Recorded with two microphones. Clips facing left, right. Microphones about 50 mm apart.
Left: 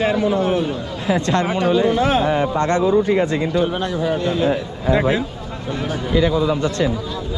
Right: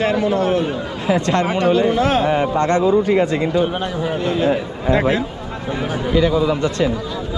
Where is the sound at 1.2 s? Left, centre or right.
Right.